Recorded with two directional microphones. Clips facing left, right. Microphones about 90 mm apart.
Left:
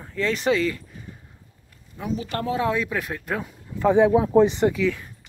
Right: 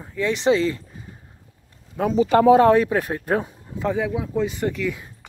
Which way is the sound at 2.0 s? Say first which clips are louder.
Right 11 dB; 90° right.